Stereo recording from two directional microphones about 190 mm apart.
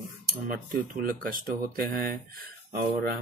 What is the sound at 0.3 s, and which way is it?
Speech, 50° right (ahead or behind).